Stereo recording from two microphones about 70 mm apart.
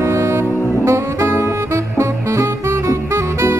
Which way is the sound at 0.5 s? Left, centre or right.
Left.